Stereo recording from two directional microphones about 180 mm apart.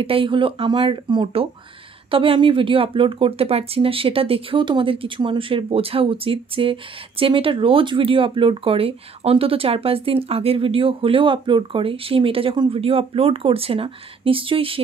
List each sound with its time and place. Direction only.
0.0 s speech: 30° right (ahead or behind)